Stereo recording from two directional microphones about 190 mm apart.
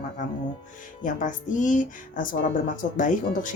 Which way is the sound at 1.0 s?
45° left (ahead or behind).